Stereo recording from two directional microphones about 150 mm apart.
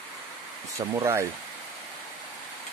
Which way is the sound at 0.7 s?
20° right (ahead or behind).